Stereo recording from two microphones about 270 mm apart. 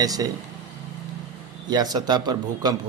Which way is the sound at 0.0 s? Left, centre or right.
Centre.